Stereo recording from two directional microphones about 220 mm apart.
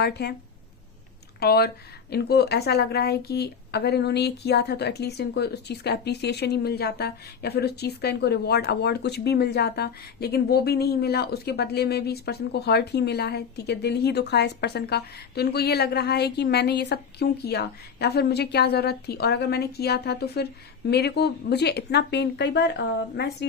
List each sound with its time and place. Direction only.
0.0 s a woman's voice: 45° left (ahead or behind)
1.4 s a woman's voice: 45° left (ahead or behind)